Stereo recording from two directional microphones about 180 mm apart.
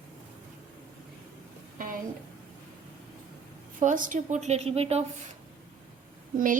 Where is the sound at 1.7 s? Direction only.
50° right (ahead or behind).